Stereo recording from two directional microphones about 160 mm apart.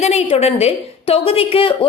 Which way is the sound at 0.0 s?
40° left (ahead or behind).